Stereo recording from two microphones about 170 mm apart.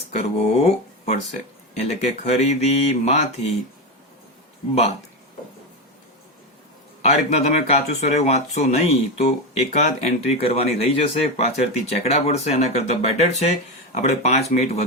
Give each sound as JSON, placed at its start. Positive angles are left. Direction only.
{"t": 0.1, "sound": "speech", "side_deg": 40}
{"t": 7.0, "sound": "speech", "side_deg": 40}